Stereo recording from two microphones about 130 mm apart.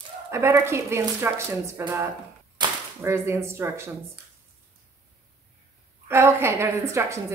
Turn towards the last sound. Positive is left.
turn(degrees=-25)  # may be behind; listen again after turning